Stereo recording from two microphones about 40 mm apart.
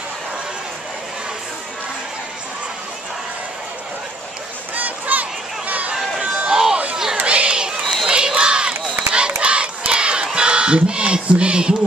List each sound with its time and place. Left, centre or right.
4.7 s a sound: right
6.5 s a sound: centre
7.2 s crowd: right
7.8 s crowd: centre
8.1 s crowd: right
9.4 s battle cry: right